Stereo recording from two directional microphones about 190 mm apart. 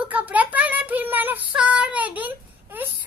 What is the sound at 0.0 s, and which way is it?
Child singing, 10° right (ahead or behind).